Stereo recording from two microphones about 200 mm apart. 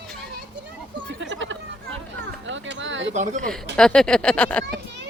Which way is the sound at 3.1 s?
35° right (ahead or behind).